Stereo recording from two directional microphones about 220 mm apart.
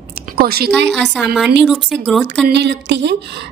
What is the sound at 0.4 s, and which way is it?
Speech, 45° right (ahead or behind).